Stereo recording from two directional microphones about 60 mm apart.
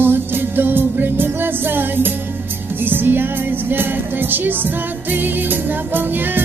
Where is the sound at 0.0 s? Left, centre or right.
Right.